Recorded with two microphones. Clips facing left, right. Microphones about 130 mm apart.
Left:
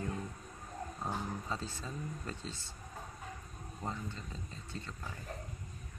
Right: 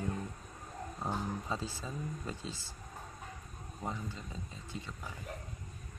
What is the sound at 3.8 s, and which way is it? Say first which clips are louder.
Speech: right 1 dB; 5° right (ahead or behind).